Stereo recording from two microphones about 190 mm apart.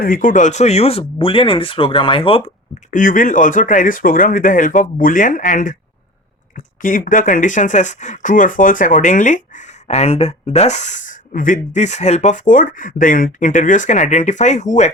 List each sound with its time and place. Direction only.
0.0 s speech: 45° left (ahead or behind); by 2.4 s 30° left (ahead or behind)
2.9 s speech: 45° left (ahead or behind)
6.8 s speech: 45° left (ahead or behind)